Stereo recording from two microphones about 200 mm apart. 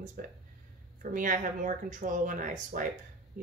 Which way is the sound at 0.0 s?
45° right (ahead or behind).